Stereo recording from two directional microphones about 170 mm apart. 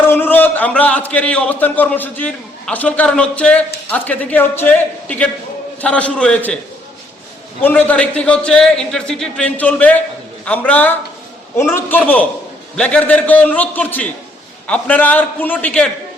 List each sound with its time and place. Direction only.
0.0 s a man's voice: 10° left (ahead or behind)
7.6 s a man's voice: 10° left (ahead or behind)